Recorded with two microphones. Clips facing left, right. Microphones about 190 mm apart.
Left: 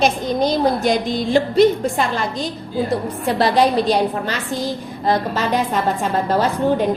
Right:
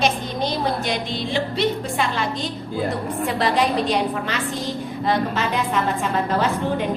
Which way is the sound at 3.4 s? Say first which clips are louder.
Left 5 dB; 35° left (ahead or behind).